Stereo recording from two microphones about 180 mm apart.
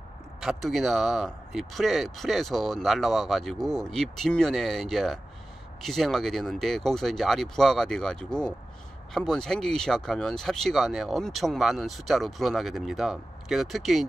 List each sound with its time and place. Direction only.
0.4 s speech: centre (ahead or behind)